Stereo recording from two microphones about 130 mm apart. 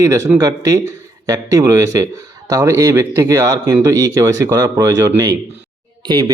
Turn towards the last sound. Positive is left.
turn(degrees=-35)  # may be behind; listen again after turning